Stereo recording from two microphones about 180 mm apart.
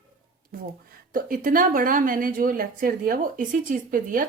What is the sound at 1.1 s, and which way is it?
A woman's voice, 50° right (ahead or behind).